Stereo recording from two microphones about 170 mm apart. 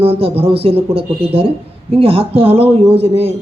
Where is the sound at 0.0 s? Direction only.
35° right (ahead or behind).